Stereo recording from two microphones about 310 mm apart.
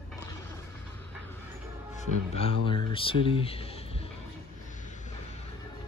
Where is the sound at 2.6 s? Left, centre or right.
Centre.